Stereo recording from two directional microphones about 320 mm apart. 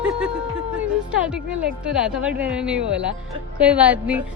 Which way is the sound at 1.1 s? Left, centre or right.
Centre.